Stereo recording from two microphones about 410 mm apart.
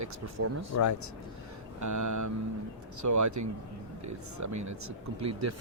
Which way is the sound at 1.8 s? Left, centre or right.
Right.